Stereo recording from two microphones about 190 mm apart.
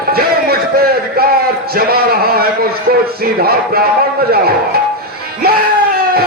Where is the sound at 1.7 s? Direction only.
55° right (ahead or behind).